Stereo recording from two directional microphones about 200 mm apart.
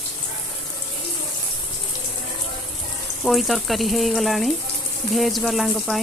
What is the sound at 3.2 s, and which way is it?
Speech, centre (ahead or behind).